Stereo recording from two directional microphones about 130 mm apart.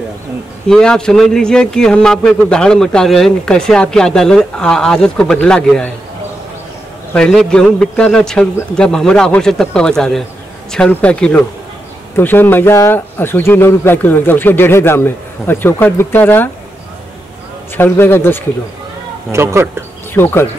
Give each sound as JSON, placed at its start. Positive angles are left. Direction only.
{"t": 0.7, "sound": "speech", "side_deg": 5}
{"t": 7.2, "sound": "a man's voice", "side_deg": 5}
{"t": 17.7, "sound": "a man's voice", "side_deg": 15}
{"t": 19.3, "sound": "speech", "side_deg": -20}
{"t": 20.2, "sound": "a man's voice", "side_deg": 15}